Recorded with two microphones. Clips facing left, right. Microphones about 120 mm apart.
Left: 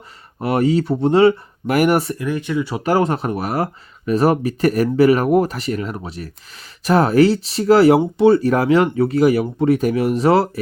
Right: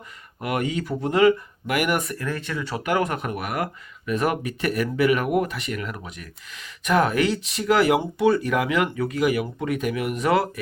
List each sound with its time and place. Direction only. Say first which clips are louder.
0.3 s speech: left 9 dB; 35° left (ahead or behind)
2.1 s speech: left 8 dB; 15° left (ahead or behind)
2.8 s speech: left 6 dB; 30° left (ahead or behind)